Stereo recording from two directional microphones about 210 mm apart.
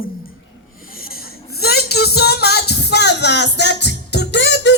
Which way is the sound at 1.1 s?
50° left (ahead or behind).